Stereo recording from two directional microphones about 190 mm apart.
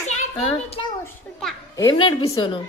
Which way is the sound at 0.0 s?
35° left (ahead or behind).